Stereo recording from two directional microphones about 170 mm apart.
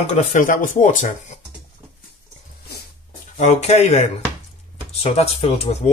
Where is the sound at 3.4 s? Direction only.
40° left (ahead or behind).